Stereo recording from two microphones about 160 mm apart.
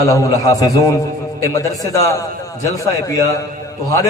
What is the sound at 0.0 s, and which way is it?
A man's voice, 20° left (ahead or behind).